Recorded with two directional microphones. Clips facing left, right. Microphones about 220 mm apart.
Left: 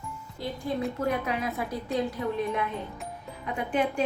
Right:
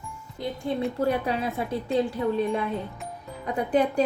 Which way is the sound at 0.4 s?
20° right (ahead or behind).